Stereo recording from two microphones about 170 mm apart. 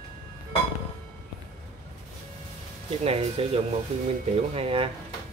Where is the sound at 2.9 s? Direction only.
35° right (ahead or behind).